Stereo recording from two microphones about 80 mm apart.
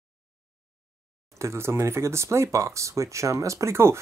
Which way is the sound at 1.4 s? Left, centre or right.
Right.